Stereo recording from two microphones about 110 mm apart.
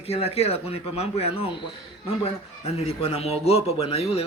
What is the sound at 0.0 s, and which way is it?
A man's voice, 65° left (ahead or behind).